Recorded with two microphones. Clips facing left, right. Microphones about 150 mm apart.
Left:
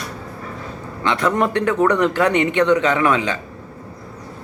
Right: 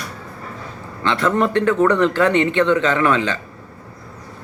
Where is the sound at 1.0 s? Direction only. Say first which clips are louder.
Right 1 dB; 15° left (ahead or behind).